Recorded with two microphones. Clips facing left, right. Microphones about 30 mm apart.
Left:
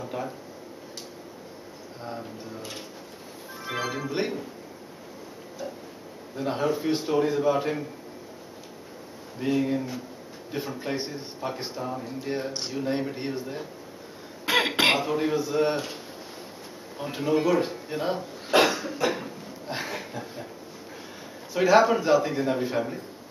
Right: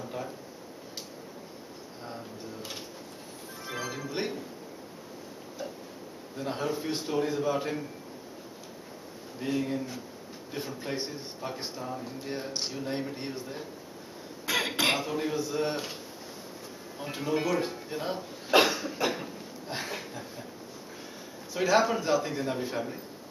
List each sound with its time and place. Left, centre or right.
0.0 s a sound: centre
2.0 s a sound: centre
3.6 s music: left
3.9 s speech: centre
5.6 s a sound: centre
6.3 s speech: centre
9.4 s speech: centre
14.4 s cough: left
15.0 s speech: centre
17.0 s speech: centre
18.5 s cough: centre
19.0 s a sound: centre
21.5 s speech: centre